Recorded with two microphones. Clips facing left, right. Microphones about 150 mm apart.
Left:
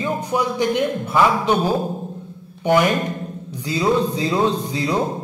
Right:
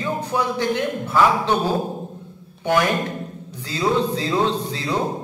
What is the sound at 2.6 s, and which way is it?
A man's voice, 15° left (ahead or behind).